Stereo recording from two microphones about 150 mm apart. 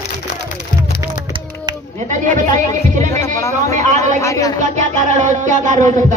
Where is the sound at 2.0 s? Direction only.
55° right (ahead or behind).